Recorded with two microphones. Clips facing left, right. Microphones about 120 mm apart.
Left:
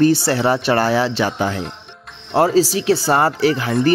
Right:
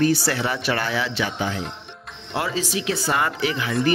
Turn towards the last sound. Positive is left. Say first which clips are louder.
# left 6 dB
turn(degrees=40)  # may be behind; listen again after turning